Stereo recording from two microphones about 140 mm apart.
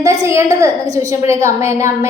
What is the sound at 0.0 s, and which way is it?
A woman's voice, 20° right (ahead or behind).